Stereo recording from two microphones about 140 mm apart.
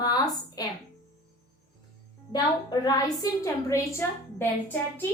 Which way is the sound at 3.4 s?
20° left (ahead or behind).